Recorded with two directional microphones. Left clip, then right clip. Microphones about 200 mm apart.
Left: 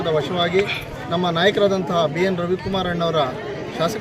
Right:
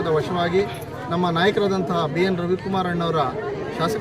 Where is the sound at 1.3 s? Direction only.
25° right (ahead or behind).